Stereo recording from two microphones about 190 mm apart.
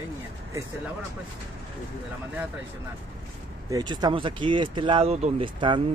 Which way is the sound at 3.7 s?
20° right (ahead or behind).